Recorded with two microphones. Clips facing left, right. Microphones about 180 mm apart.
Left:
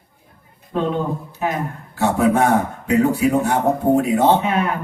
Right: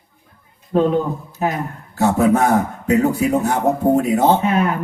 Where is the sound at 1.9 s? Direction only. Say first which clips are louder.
Right 2 dB; 40° right (ahead or behind).